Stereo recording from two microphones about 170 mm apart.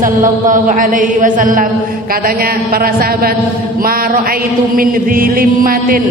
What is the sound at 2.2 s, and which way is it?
Chant, 60° right (ahead or behind).